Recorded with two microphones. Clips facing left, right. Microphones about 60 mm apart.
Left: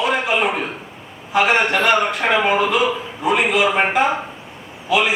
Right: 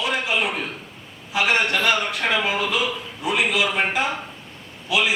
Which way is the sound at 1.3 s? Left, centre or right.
Centre.